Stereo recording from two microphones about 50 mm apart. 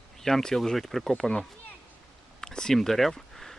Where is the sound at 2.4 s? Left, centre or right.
Centre.